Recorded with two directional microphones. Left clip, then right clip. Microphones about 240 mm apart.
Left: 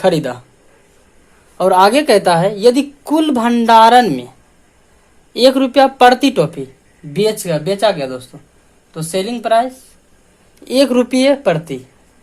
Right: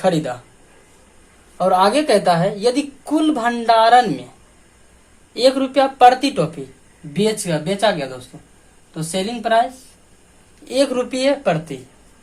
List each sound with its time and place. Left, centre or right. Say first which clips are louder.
0.0 s a woman's voice: left 4 dB; left
1.5 s a woman's voice: left 5 dB; left
5.3 s a woman's voice: left 5 dB; left
10.7 s a woman's voice: left 6 dB; left